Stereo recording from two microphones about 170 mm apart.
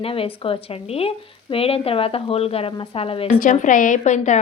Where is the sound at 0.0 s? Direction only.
35° left (ahead or behind).